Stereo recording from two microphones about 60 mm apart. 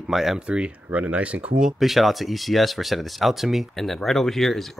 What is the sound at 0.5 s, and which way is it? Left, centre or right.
Speech, centre.